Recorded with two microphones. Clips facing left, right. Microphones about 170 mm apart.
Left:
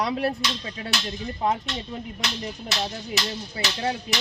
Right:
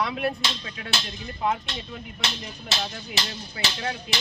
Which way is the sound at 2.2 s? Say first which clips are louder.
Even; 25° right (ahead or behind).